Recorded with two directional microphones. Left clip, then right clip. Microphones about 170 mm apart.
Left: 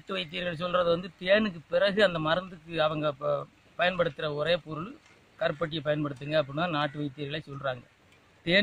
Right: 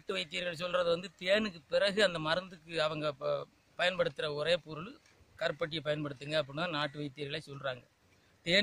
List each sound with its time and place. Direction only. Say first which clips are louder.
0.0 s speech: left 3 dB; 15° right (ahead or behind)